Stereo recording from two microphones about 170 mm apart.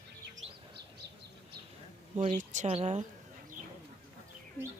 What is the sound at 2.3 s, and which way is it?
Speech, 45° right (ahead or behind).